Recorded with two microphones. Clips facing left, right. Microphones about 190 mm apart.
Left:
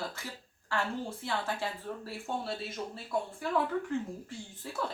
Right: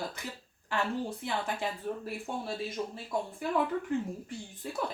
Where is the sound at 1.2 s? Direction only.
15° right (ahead or behind).